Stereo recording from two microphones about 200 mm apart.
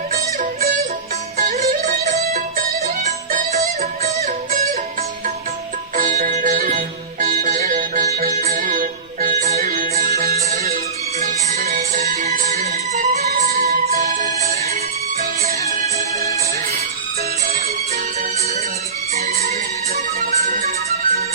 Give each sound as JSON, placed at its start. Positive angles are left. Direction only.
{"t": 1.4, "sound": "music", "side_deg": -40}
{"t": 6.0, "sound": "music", "side_deg": -45}
{"t": 19.1, "sound": "music", "side_deg": -35}